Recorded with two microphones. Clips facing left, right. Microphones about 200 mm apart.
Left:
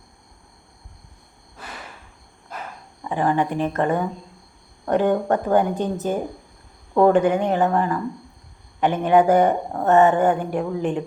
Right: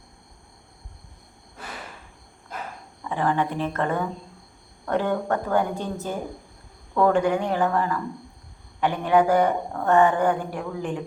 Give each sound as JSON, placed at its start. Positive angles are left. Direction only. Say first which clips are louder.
{"t": 3.0, "sound": "a woman's voice", "louder": "left 3 dB", "side_deg": 15}